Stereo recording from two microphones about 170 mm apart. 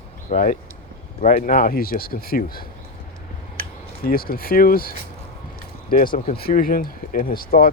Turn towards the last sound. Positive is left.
turn(degrees=60)  # may be behind; listen again after turning